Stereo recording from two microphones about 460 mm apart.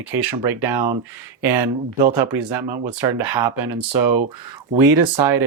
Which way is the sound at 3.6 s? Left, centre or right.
Right.